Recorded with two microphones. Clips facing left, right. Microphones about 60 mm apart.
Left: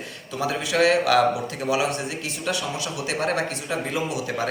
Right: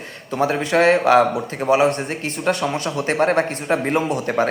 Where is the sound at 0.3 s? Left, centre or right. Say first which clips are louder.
Right 5 dB; right.